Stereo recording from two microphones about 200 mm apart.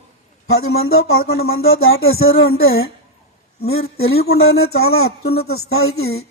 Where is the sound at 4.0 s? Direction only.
90° left.